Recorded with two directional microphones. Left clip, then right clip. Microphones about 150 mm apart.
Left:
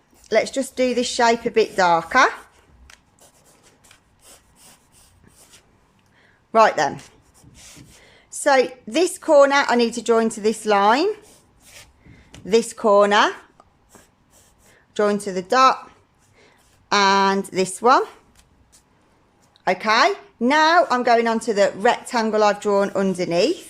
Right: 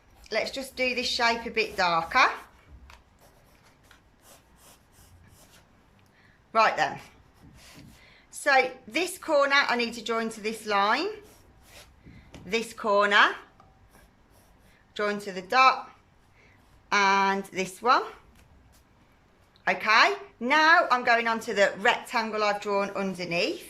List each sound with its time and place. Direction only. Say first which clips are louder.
0.3 s a woman's voice: left 10 dB; 50° left (ahead or behind)
6.5 s speech: left 7 dB; 45° left (ahead or behind)
8.0 s a woman's voice: left 7 dB; 45° left (ahead or behind)
12.5 s speech: left 10 dB; 45° left (ahead or behind)
14.9 s a woman's voice: left 9 dB; 45° left (ahead or behind)
16.9 s speech: left 6 dB; 35° left (ahead or behind)
19.6 s speech: left 4 dB; 35° left (ahead or behind)